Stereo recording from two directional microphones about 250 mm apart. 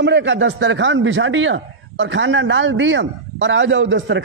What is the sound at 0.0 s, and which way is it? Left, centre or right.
Speech, right.